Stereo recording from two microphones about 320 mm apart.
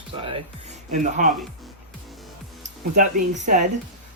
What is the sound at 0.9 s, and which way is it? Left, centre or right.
Speech, right.